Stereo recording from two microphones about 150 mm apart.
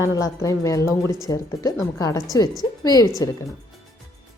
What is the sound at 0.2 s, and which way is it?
A woman's voice, 20° left (ahead or behind).